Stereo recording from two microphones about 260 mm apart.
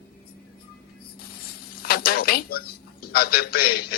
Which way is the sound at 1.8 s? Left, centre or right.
Left.